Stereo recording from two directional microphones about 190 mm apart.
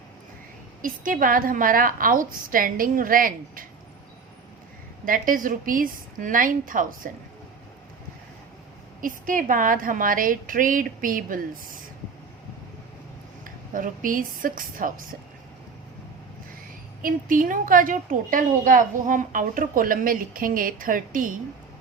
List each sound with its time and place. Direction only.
0.8 s a woman's voice: 45° right (ahead or behind)
5.0 s a woman's voice: 45° right (ahead or behind)
9.0 s a woman's voice: 45° right (ahead or behind)
13.7 s a woman's voice: 45° right (ahead or behind)
17.0 s a woman's voice: 45° right (ahead or behind)